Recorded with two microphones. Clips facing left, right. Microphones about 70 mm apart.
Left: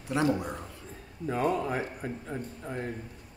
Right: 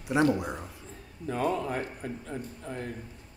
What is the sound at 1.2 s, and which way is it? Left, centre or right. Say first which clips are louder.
Speech: left 1 dB; centre.